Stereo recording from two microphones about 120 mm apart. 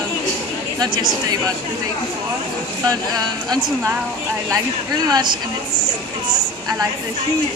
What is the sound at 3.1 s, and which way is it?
Speech, 35° right (ahead or behind).